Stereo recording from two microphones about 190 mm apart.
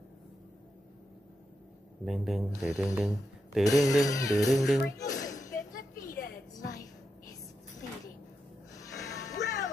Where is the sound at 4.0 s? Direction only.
20° left (ahead or behind).